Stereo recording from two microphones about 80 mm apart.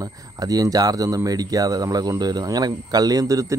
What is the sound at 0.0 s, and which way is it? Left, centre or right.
Speech, right.